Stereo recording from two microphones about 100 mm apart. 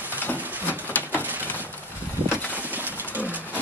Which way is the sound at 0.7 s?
20° left (ahead or behind).